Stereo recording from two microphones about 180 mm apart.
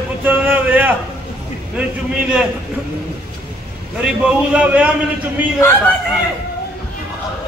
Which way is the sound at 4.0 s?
5° right (ahead or behind).